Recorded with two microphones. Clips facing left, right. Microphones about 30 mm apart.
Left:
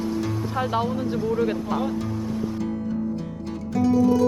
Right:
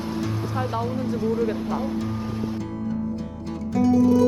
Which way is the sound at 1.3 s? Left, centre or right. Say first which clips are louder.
Left 1 dB; centre.